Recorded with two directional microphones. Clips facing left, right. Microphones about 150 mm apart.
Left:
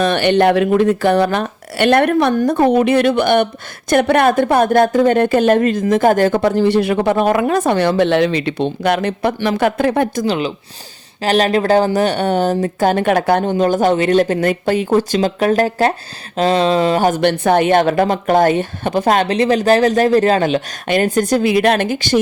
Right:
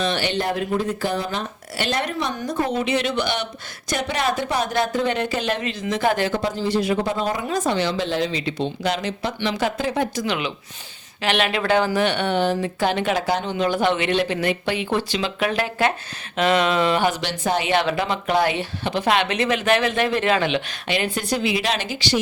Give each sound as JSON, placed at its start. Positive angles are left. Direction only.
{"t": 0.0, "sound": "speech", "side_deg": 60}
{"t": 10.2, "sound": "speech", "side_deg": 35}